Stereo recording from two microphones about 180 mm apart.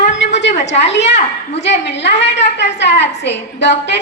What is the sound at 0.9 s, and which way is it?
A woman's voice, 75° left (ahead or behind).